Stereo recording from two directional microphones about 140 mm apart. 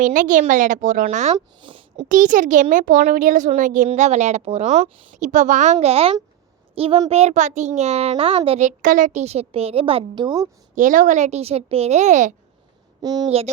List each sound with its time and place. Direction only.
0.0 s a woman's voice: 70° right (ahead or behind)
1.0 s a child's voice: 50° right (ahead or behind)
1.6 s a sound: 40° right (ahead or behind)
2.0 s a woman's voice: 65° right (ahead or behind); by 10.5 s 30° right (ahead or behind)
10.8 s a woman's voice: 65° right (ahead or behind)
13.0 s speech: 30° right (ahead or behind)